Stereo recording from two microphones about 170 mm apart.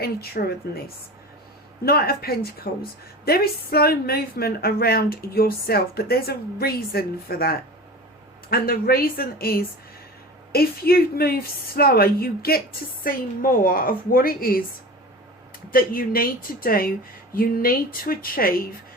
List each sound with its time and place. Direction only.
0.0 s speech: 65° left (ahead or behind)
1.8 s speech: 65° left (ahead or behind)
15.7 s speech: 55° left (ahead or behind)